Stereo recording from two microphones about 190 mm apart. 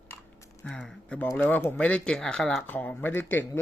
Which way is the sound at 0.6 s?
5° left (ahead or behind).